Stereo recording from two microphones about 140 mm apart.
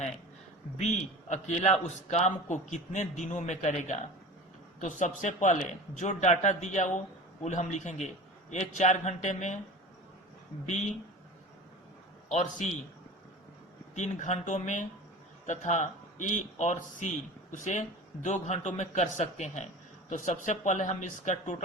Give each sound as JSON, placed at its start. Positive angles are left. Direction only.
{"t": 0.8, "sound": "a man's voice", "side_deg": 55}
{"t": 12.3, "sound": "a man's voice", "side_deg": 55}
{"t": 13.9, "sound": "a man's voice", "side_deg": 60}